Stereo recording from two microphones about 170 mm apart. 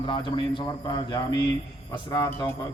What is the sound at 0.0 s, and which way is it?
A man's voice, 30° left (ahead or behind).